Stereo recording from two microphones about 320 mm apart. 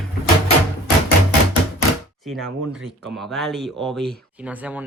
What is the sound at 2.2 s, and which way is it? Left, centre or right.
Speech, centre.